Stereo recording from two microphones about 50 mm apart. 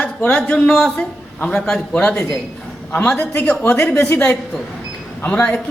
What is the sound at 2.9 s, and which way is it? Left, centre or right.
A man's voice, left.